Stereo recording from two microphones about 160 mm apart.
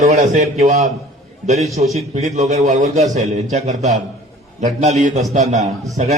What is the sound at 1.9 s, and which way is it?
A man's voice, 45° right (ahead or behind).